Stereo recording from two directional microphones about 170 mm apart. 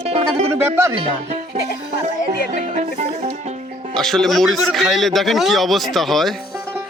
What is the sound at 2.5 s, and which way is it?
Speech, 45° right (ahead or behind).